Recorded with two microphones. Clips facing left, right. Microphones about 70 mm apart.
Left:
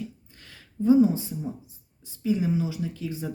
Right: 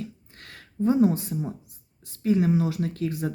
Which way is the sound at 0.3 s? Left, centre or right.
Right.